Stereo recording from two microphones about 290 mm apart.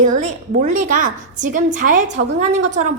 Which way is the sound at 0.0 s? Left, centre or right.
Right.